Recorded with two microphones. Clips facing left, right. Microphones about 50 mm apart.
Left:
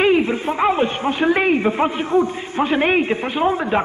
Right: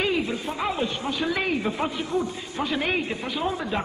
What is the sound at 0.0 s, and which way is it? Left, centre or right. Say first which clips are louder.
A man's voice: left 9 dB; left.